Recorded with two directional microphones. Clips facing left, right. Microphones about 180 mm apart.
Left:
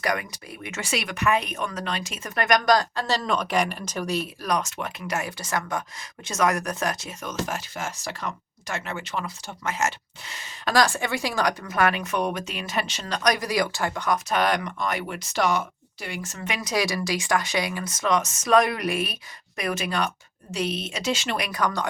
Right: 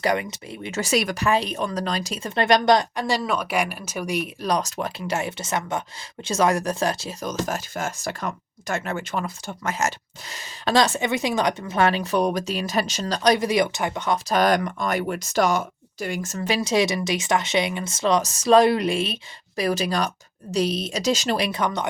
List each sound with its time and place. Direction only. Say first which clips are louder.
0.0 s speech: right 4 dB; 25° right (ahead or behind)
4.4 s speech: right 4 dB; 35° right (ahead or behind)
10.7 s speech: right 2 dB; 20° right (ahead or behind)
14.3 s speech: right 8 dB; 40° right (ahead or behind); by 21.8 s 20° right (ahead or behind)